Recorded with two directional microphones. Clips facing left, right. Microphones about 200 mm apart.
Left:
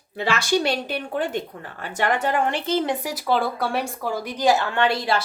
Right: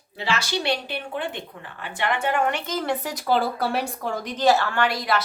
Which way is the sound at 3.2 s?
Centre (ahead or behind).